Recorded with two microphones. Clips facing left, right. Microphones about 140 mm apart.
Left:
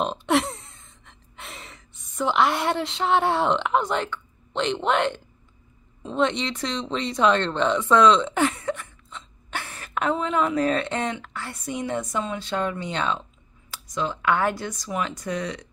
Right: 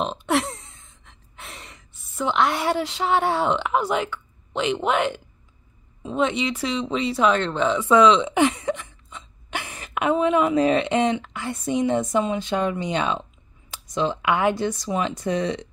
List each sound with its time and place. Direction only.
0.0 s gasp: centre (ahead or behind)
6.0 s speech: 5° right (ahead or behind); by 15.7 s 25° right (ahead or behind)